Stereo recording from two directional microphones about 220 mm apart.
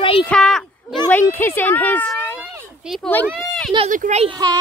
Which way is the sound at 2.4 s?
Centre (ahead or behind).